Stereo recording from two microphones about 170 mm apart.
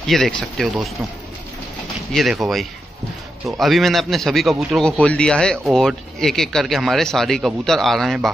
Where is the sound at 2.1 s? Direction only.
Centre (ahead or behind).